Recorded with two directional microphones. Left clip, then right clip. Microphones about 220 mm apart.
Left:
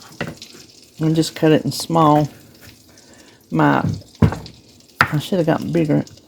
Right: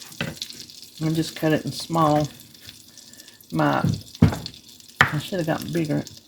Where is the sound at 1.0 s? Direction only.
45° left (ahead or behind).